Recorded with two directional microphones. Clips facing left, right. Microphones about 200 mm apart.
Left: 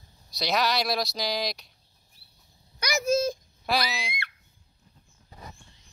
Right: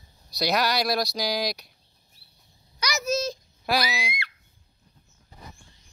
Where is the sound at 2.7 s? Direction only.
55° left (ahead or behind).